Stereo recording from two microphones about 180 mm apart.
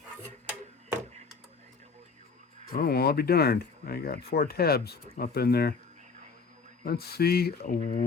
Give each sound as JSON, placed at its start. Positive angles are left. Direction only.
{"t": 2.7, "sound": "speech", "side_deg": 60}
{"t": 6.8, "sound": "speech", "side_deg": 60}